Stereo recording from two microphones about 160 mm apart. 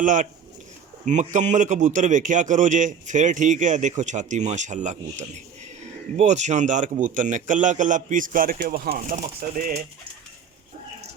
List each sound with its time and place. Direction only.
0.0 s a man's voice: 55° right (ahead or behind)